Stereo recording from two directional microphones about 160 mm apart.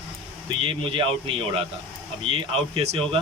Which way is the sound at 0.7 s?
35° right (ahead or behind).